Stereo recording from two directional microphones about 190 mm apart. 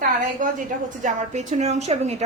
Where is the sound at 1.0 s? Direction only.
40° right (ahead or behind).